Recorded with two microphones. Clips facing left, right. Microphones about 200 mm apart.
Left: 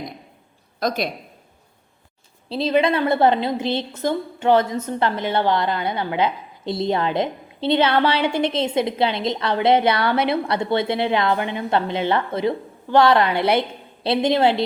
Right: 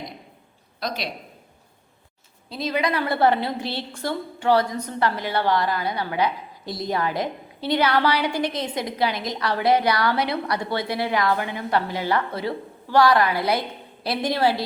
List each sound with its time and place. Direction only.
0.8 s a man's voice: 50° left (ahead or behind)
2.5 s a woman's voice: 30° left (ahead or behind)